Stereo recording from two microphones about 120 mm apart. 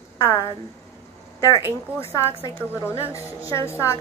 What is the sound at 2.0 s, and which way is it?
A woman's voice, 20° left (ahead or behind).